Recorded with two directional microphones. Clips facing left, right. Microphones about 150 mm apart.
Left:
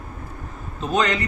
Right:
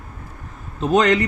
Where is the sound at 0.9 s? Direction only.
65° right (ahead or behind).